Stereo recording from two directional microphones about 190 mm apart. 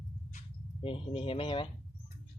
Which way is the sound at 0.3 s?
30° left (ahead or behind).